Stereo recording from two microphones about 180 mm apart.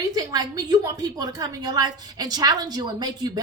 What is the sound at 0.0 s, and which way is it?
A woman's voice, 20° right (ahead or behind).